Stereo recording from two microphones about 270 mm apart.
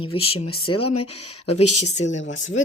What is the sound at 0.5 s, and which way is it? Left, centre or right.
Speech, left.